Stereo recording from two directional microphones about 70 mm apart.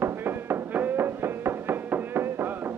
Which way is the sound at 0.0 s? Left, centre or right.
Right.